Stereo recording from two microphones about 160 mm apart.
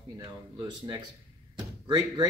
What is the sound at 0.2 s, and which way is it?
Speech, 30° right (ahead or behind).